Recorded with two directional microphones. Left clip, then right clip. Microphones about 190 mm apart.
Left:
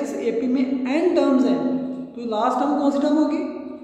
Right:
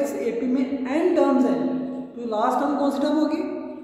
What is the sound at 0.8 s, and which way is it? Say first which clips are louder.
A woman's voice: even; centre (ahead or behind).